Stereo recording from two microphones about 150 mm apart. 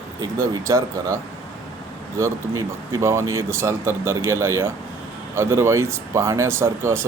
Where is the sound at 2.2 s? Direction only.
20° right (ahead or behind).